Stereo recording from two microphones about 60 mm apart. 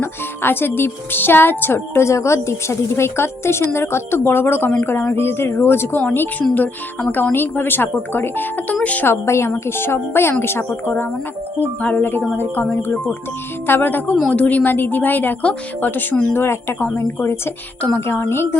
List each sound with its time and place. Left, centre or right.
0.0 s a woman's voice: left
9.0 s a woman's voice: left
11.8 s a woman's voice: left
13.7 s speech: left
16.3 s speech: left
18.0 s a woman's voice: left